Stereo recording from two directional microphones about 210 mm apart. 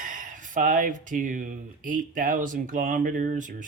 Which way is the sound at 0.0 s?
40° right (ahead or behind).